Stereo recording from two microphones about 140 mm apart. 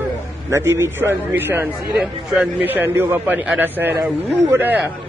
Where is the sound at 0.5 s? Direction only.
20° right (ahead or behind).